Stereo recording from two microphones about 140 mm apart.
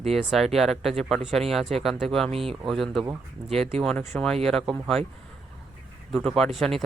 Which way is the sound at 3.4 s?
30° right (ahead or behind).